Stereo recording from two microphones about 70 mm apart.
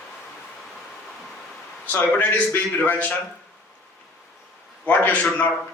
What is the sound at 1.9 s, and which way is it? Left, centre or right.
A man's voice, left.